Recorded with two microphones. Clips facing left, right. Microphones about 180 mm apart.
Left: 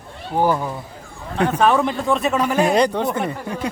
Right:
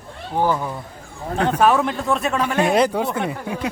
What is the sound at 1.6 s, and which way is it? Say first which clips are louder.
Speech: even; centre (ahead or behind).